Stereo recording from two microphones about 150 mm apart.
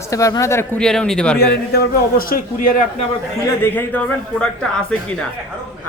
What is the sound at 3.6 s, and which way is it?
Speech, 10° left (ahead or behind).